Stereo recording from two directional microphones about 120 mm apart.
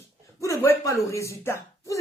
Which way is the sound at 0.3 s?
25° left (ahead or behind).